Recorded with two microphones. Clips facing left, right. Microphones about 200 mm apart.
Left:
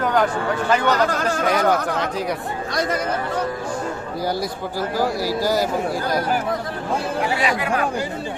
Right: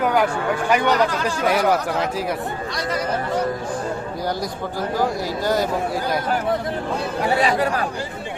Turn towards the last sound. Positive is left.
turn(degrees=-35)  # may be behind; listen again after turning